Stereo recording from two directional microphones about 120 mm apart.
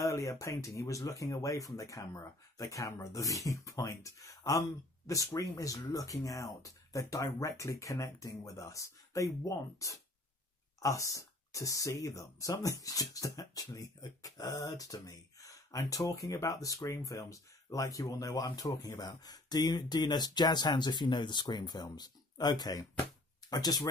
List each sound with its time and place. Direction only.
0.0 s speech: 25° left (ahead or behind)